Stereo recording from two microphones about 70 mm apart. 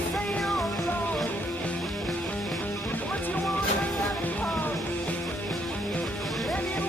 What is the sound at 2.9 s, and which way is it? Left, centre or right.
Music, left.